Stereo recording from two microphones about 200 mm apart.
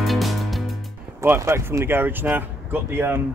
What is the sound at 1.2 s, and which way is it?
Speech, 15° right (ahead or behind).